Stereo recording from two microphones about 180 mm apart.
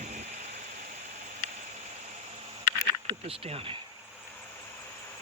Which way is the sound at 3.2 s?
30° right (ahead or behind).